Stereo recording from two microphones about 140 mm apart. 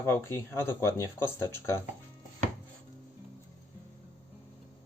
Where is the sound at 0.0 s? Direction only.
20° left (ahead or behind).